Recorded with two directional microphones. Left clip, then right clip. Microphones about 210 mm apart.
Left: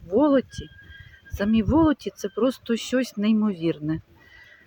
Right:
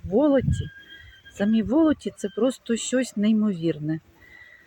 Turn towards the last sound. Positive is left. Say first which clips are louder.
# even
turn(degrees=0)  # may be behind; listen again after turning